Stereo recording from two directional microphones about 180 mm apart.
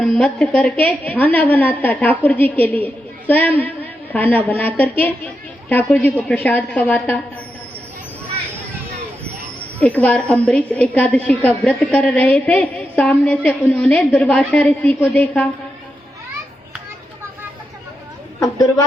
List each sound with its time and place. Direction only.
0.0 s a woman's voice: 5° left (ahead or behind)
9.8 s a woman's voice: 5° left (ahead or behind)
18.3 s a woman's voice: 20° left (ahead or behind)